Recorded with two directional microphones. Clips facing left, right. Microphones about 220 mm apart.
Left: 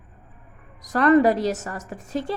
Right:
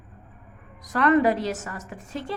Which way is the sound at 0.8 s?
40° left (ahead or behind).